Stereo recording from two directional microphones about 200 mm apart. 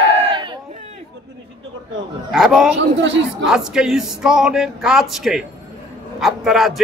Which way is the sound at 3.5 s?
5° right (ahead or behind).